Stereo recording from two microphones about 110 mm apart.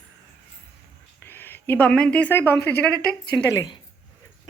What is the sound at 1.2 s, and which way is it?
A woman's voice, 20° left (ahead or behind).